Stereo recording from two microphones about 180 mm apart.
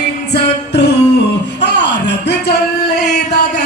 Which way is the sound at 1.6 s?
75° left (ahead or behind).